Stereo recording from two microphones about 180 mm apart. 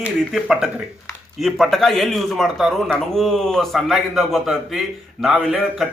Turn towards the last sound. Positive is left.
turn(degrees=-5)  # may be behind; listen again after turning